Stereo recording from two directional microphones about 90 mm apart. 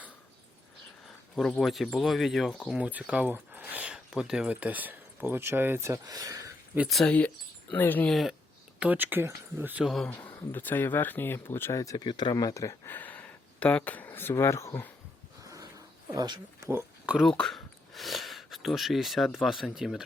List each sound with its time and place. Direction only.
1.0 s speech: centre (ahead or behind)
2.7 s speech: 15° right (ahead or behind)
5.8 s speech: 40° right (ahead or behind)
6.7 s speech: 20° right (ahead or behind)
7.8 s speech: 20° left (ahead or behind)
8.0 s speech: centre (ahead or behind)
8.8 s speech: 20° right (ahead or behind)
9.8 s speech: centre (ahead or behind)
10.2 s speech: 25° left (ahead or behind)
11.9 s speech: 55° left (ahead or behind); by 12.9 s 35° left (ahead or behind)
12.9 s speech: 20° left (ahead or behind)
16.1 s speech: 50° right (ahead or behind)
16.6 s a sound: 30° right (ahead or behind)
17.2 s speech: 5° left (ahead or behind)